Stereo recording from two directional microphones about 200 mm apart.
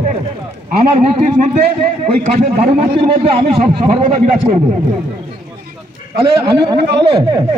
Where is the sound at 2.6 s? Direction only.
30° right (ahead or behind).